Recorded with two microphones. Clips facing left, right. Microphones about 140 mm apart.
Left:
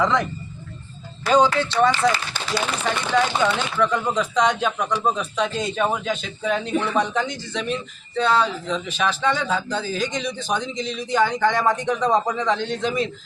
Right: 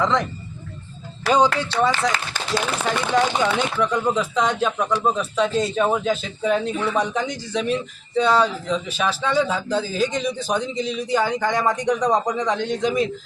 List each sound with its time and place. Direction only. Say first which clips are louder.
0.0 s speech: even; centre (ahead or behind)
1.3 s a man's voice: left 1 dB; 10° right (ahead or behind)
2.1 s speech: right 1 dB; 45° right (ahead or behind)
3.1 s a man's voice: even; 15° right (ahead or behind)